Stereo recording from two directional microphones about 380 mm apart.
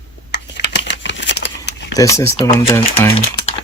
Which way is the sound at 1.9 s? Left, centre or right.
Centre.